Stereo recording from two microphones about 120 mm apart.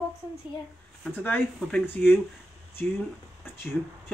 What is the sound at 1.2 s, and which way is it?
Speech, 15° left (ahead or behind).